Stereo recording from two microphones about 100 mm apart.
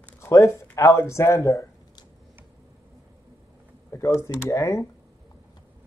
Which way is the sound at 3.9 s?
30° left (ahead or behind).